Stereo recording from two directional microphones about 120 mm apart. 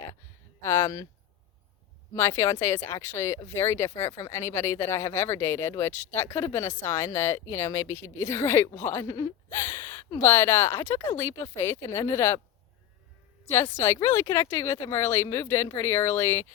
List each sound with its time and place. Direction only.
0.6 s speech: 25° left (ahead or behind)
2.1 s speech: 20° left (ahead or behind)
13.5 s speech: 20° left (ahead or behind)